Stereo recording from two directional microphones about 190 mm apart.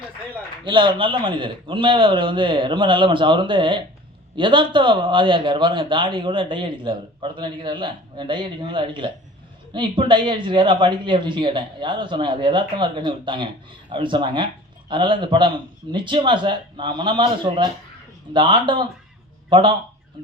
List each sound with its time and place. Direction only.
0.6 s a man's voice: 25° right (ahead or behind)